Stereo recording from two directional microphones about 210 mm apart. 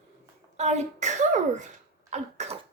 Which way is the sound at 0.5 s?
30° right (ahead or behind).